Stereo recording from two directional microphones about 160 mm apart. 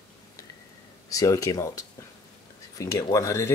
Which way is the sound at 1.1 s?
20° left (ahead or behind).